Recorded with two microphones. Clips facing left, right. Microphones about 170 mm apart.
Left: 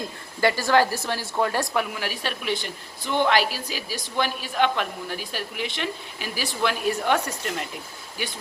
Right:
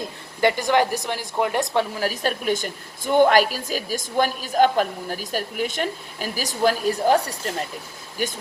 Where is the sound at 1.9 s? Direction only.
40° right (ahead or behind).